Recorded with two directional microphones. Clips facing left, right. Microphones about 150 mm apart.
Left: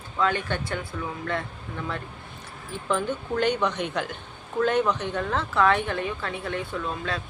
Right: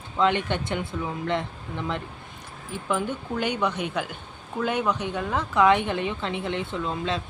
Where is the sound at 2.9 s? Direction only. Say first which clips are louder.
Left 1 dB; 10° right (ahead or behind).